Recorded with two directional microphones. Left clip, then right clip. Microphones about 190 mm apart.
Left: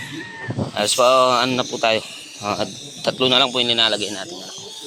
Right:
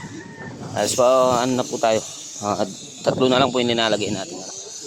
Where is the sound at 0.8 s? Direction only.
25° right (ahead or behind).